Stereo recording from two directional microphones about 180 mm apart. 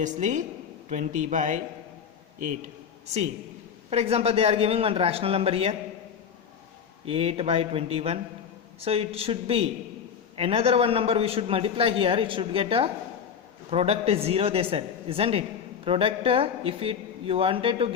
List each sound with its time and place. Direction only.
0.0 s a man's voice: 45° right (ahead or behind)
3.8 s speech: 35° right (ahead or behind)
7.0 s speech: 30° right (ahead or behind)